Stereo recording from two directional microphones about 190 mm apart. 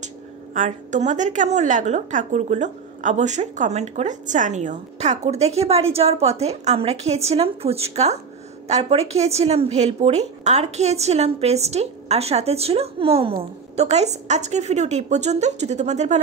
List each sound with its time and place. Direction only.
0.6 s a woman's voice: 40° right (ahead or behind)